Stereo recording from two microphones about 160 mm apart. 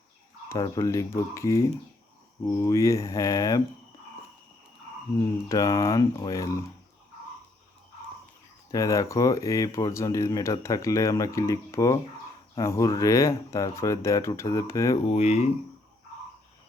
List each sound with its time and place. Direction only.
0.4 s speech: 20° left (ahead or behind)
5.5 s speech: 20° left (ahead or behind)
8.7 s speech: 20° left (ahead or behind)
15.1 s speech: 45° left (ahead or behind)